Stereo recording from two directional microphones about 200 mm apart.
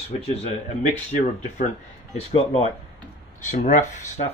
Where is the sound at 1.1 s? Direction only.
35° left (ahead or behind).